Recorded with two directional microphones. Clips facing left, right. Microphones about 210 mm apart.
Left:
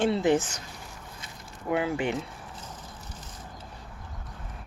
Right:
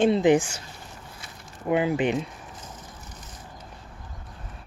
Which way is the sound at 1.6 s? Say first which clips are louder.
Right 4 dB; 20° right (ahead or behind).